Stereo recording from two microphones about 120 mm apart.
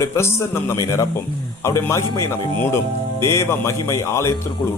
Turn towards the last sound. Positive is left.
turn(degrees=25)  # may be behind; listen again after turning